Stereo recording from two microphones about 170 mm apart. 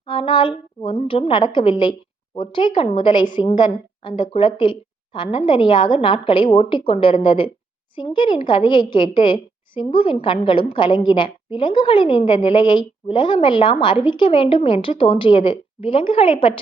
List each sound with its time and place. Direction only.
0.0 s a woman's voice: 30° left (ahead or behind)